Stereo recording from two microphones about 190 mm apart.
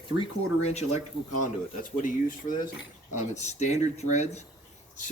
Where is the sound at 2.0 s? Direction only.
45° left (ahead or behind).